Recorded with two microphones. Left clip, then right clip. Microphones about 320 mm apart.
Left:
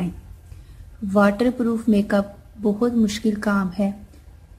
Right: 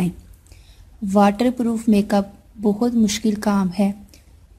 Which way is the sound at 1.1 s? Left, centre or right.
Right.